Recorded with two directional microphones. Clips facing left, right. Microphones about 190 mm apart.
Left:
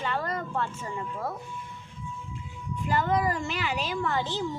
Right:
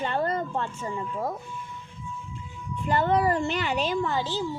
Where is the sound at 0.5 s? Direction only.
15° right (ahead or behind).